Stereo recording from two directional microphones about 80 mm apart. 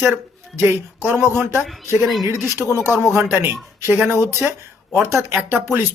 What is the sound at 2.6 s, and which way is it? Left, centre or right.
Speech, right.